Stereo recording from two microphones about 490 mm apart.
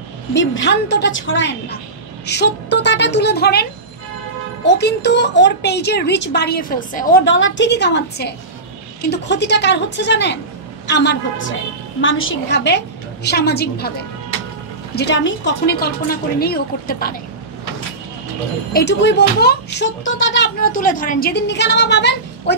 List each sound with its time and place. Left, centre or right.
0.3 s a woman's voice: left
4.6 s a woman's voice: left
15.0 s a woman's voice: left
18.7 s a woman's voice: centre